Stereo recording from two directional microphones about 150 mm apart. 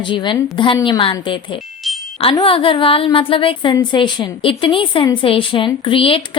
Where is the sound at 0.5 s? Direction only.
30° left (ahead or behind).